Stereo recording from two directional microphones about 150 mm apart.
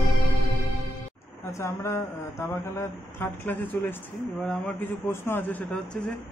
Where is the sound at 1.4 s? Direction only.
20° left (ahead or behind).